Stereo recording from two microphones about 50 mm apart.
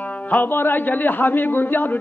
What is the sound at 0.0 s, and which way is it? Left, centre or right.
Music, left.